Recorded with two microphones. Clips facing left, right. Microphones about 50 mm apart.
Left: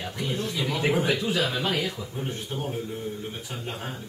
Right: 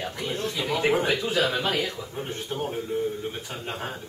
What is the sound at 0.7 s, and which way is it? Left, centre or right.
Speech, centre.